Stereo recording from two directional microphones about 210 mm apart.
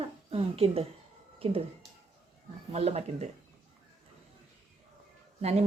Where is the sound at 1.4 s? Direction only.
25° right (ahead or behind).